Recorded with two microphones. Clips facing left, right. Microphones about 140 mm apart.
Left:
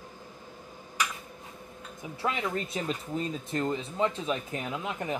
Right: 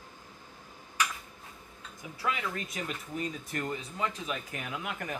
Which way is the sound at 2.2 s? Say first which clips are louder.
Left 3 dB; 30° left (ahead or behind).